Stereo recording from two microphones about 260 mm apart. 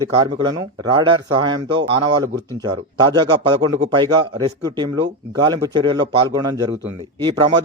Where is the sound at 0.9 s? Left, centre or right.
Centre.